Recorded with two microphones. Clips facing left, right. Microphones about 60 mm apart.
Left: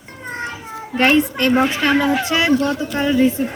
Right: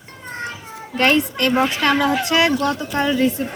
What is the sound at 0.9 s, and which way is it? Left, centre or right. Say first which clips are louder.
A child's voice: left 2 dB; left.